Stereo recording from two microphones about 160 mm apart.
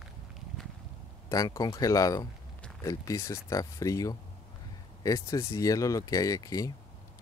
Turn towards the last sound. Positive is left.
turn(degrees=20)  # may be behind; listen again after turning